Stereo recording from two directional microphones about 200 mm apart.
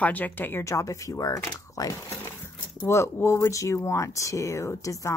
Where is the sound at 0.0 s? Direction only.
10° left (ahead or behind).